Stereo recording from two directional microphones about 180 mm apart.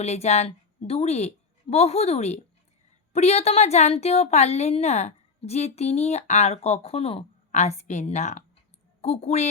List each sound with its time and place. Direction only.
0.0 s a woman's voice: 35° left (ahead or behind)